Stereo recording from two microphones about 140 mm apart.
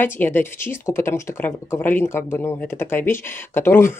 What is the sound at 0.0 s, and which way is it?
Speech, 15° left (ahead or behind).